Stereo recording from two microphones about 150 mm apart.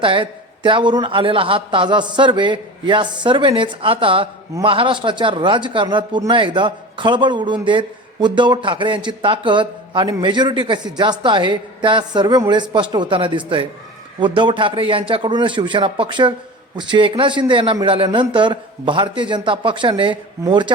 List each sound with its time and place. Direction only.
0.0 s speech: 35° right (ahead or behind)